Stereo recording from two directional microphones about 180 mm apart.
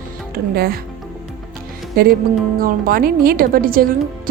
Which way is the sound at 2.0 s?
55° right (ahead or behind).